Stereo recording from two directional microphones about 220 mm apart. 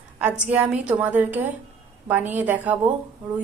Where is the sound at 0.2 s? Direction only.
5° right (ahead or behind).